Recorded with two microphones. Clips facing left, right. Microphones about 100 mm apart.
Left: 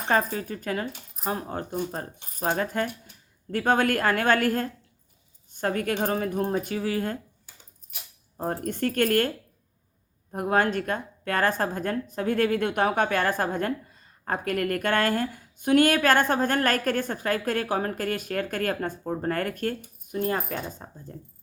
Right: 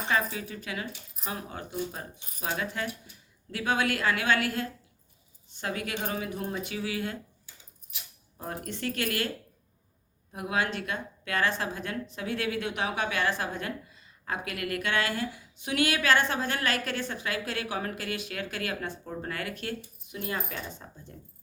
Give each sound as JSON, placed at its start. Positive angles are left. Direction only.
{"t": 0.1, "sound": "a woman's voice", "side_deg": 45}
{"t": 8.6, "sound": "a woman's voice", "side_deg": 50}
{"t": 10.3, "sound": "a woman's voice", "side_deg": 45}